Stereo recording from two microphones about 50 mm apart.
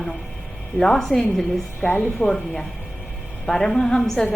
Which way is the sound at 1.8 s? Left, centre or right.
Left.